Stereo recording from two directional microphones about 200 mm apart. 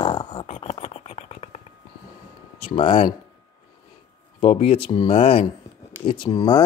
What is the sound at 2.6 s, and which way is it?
Speech, 25° left (ahead or behind).